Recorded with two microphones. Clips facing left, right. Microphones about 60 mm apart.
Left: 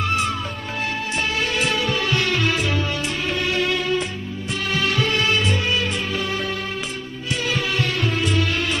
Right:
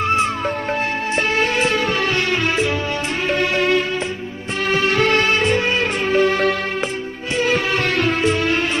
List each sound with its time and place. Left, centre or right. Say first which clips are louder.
0.0 s music: right 5 dB; right
4.9 s music: right 5 dB; right
7.9 s music: right 5 dB; right
8.2 s music: right 4 dB; right